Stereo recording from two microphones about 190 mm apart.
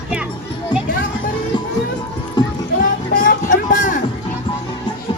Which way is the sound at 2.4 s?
25° left (ahead or behind).